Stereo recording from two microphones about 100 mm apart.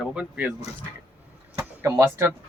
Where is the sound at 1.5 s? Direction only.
25° right (ahead or behind).